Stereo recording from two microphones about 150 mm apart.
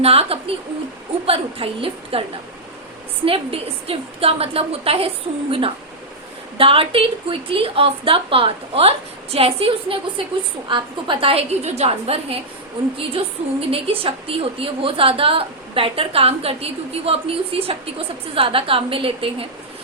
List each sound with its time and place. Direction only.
0.0 s a woman's voice: 40° right (ahead or behind)
3.2 s a woman's voice: 40° right (ahead or behind)